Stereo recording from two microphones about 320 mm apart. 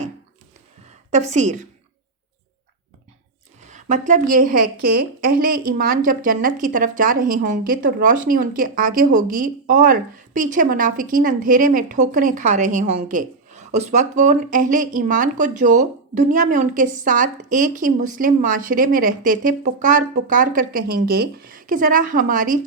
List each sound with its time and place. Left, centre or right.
1.1 s a woman's voice: right
3.7 s a woman's voice: right